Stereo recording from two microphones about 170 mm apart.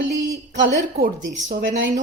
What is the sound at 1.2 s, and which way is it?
Speech, 90° right.